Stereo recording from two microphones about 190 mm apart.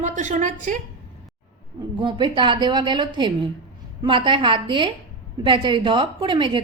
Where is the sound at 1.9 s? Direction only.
25° right (ahead or behind).